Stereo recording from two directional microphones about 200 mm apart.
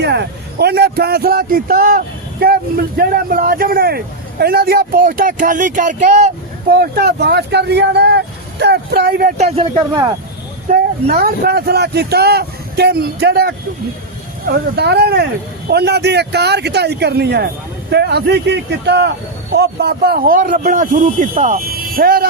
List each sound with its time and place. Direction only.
0.0 s speech: 55° right (ahead or behind); by 6.7 s 35° right (ahead or behind)
6.7 s speech: 50° right (ahead or behind)
9.6 s speech: 20° right (ahead or behind)
10.7 s speech: 50° right (ahead or behind)
14.8 s speech: 55° right (ahead or behind); by 21.6 s 35° right (ahead or behind)
21.7 s speech: 45° right (ahead or behind)